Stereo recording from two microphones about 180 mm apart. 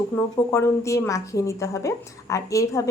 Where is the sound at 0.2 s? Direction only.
15° left (ahead or behind).